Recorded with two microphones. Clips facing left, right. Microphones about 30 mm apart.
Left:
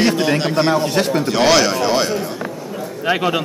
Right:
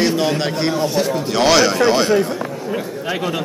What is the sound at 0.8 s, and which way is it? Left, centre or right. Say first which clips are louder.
Speech: left 1 dB; left.